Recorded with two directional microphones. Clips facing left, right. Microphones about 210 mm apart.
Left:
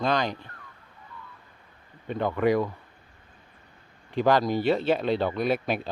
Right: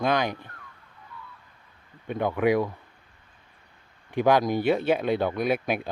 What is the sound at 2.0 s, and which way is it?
Speech, 10° right (ahead or behind).